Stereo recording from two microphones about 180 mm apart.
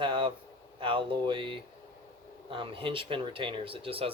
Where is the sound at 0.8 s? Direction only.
30° right (ahead or behind).